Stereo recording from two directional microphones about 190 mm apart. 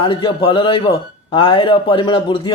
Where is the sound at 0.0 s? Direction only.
25° left (ahead or behind).